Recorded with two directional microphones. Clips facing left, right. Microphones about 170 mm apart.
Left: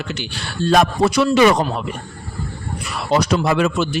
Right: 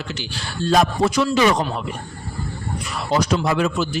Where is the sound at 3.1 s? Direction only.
70° left (ahead or behind).